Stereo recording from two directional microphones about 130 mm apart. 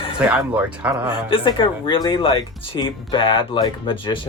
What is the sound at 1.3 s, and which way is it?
Speech, 40° left (ahead or behind).